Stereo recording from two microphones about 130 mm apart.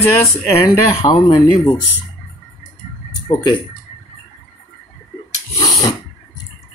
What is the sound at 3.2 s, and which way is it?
Speech, 35° left (ahead or behind).